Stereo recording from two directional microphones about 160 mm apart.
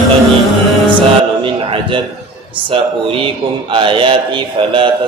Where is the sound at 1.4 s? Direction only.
30° right (ahead or behind).